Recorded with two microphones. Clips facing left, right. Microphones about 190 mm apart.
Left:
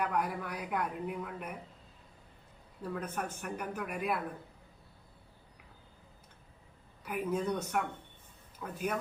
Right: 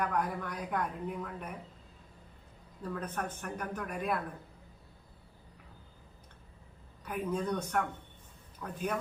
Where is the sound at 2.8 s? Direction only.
10° left (ahead or behind).